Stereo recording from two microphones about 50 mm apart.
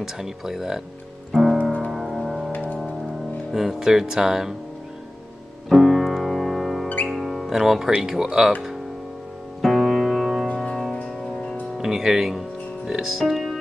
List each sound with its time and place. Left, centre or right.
0.0 s speech: centre
1.3 s piano: centre
1.6 s piano: left
1.9 s music: centre
2.5 s music: left
3.5 s speech: centre
5.7 s music: centre
8.0 s speech: centre
9.6 s music: centre
10.5 s music: centre
11.8 s speech: centre